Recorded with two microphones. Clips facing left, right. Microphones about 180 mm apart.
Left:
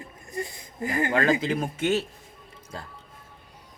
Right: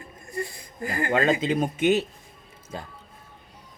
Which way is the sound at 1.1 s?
25° right (ahead or behind).